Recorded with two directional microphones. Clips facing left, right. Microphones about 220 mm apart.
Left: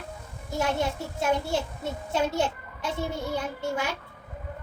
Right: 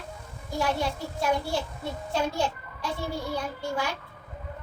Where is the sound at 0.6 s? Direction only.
20° left (ahead or behind).